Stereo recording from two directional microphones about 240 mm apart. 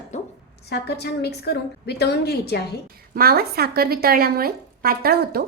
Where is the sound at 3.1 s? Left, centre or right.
Right.